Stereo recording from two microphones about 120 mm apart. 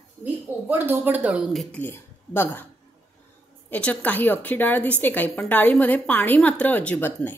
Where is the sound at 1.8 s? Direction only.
15° left (ahead or behind).